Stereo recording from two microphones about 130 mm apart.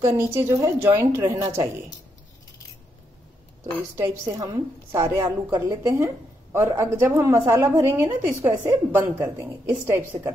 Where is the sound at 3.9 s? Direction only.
25° right (ahead or behind).